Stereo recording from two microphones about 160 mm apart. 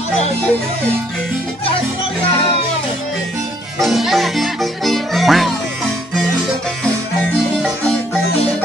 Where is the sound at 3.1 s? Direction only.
Centre (ahead or behind).